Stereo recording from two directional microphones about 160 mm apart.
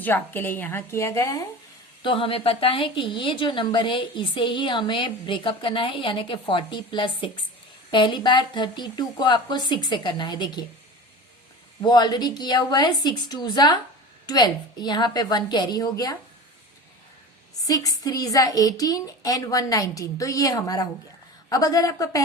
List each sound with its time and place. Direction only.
0.0 s a woman's voice: 15° left (ahead or behind)
2.0 s a woman's voice: 30° left (ahead or behind)
11.8 s a woman's voice: 25° left (ahead or behind)
17.6 s a woman's voice: 20° left (ahead or behind)